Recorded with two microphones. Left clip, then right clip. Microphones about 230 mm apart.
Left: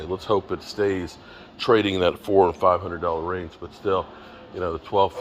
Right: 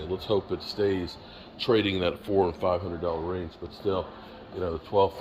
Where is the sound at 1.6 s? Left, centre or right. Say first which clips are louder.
Left 6 dB; centre.